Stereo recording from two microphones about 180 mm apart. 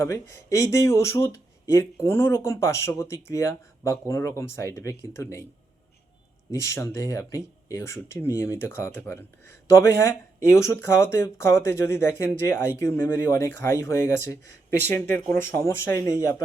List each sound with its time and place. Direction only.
0.6 s speech: 15° left (ahead or behind)
6.6 s speech: 15° left (ahead or behind)